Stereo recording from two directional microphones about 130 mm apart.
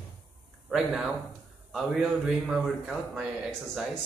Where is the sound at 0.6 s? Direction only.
5° right (ahead or behind).